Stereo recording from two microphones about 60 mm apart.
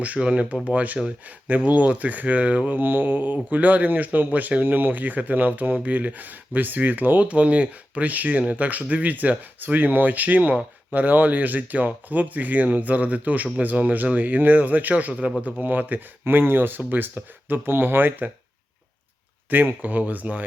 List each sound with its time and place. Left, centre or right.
0.0 s speech: right
19.8 s speech: right